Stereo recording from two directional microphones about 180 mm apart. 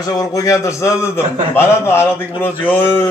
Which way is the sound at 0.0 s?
20° left (ahead or behind).